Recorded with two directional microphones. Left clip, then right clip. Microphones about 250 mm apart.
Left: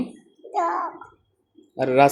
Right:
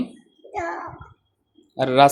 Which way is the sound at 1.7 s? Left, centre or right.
Right.